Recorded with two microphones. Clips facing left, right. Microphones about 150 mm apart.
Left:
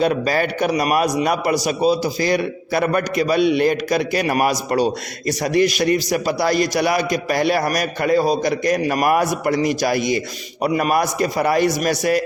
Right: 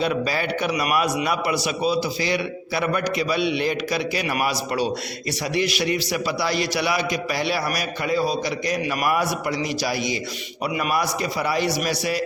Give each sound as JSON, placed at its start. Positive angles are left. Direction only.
{"t": 0.0, "sound": "a man's voice", "side_deg": 45}